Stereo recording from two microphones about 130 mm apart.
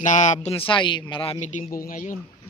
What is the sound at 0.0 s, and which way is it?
Speech, 70° left (ahead or behind).